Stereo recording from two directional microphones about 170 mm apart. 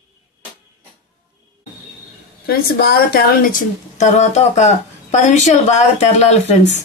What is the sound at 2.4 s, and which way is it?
A woman's voice, 65° left (ahead or behind).